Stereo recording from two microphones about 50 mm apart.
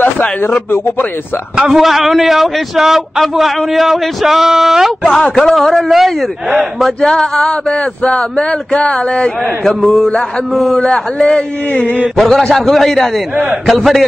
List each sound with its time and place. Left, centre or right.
1.7 s a man's voice: centre
5.0 s a man's voice: left; by 6.9 s centre
7.0 s speech: centre
9.8 s a sound: centre
10.5 s a man's voice: centre
10.8 s speech: centre
12.2 s a man's voice: centre